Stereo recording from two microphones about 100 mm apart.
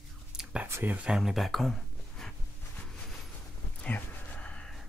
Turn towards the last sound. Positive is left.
turn(degrees=10)  # may be behind; listen again after turning